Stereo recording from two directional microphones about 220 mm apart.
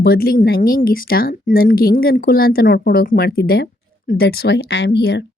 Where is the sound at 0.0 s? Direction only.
45° left (ahead or behind).